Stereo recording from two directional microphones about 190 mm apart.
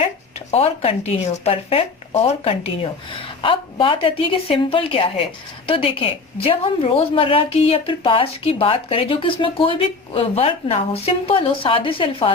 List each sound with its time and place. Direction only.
0.0 s a woman's voice: 35° left (ahead or behind)